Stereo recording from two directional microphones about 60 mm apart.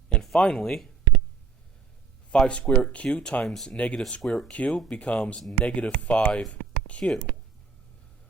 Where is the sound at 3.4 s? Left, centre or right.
Centre.